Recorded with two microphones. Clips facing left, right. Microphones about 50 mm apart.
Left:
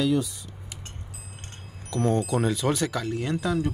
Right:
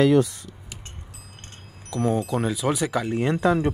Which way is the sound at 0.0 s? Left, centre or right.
Right.